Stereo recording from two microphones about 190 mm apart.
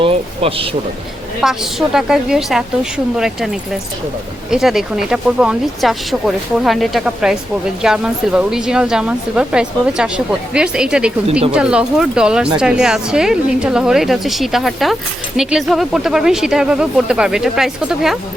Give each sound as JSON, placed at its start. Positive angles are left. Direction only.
{"t": 0.0, "sound": "speech", "side_deg": -30}
{"t": 1.4, "sound": "speech", "side_deg": -5}
{"t": 4.5, "sound": "speech", "side_deg": 0}